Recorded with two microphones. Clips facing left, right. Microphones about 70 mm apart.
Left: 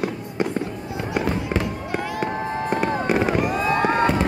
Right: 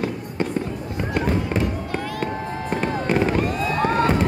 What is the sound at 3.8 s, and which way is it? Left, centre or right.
Fireworks, left.